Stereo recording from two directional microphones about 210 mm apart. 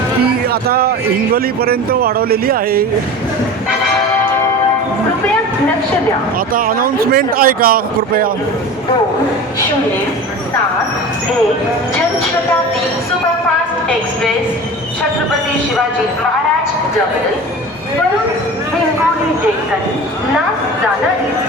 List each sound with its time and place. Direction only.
0.4 s a man's voice: 45° right (ahead or behind)
6.5 s a man's voice: 45° right (ahead or behind)